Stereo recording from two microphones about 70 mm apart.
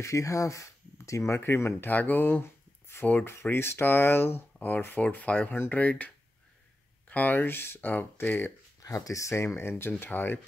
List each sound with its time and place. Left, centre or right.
0.0 s speech: left
8.8 s speech: left